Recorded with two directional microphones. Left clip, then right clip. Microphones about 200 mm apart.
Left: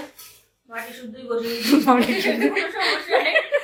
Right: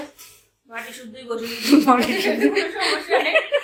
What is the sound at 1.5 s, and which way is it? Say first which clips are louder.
Speech: right 2 dB; 5° right (ahead or behind).